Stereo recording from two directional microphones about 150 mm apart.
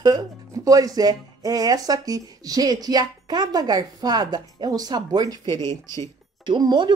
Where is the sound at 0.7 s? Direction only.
25° right (ahead or behind).